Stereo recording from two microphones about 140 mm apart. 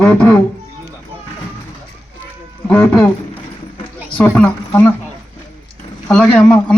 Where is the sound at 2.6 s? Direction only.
15° left (ahead or behind).